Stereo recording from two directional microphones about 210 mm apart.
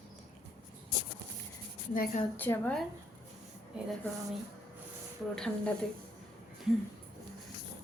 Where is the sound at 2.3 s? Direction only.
10° left (ahead or behind).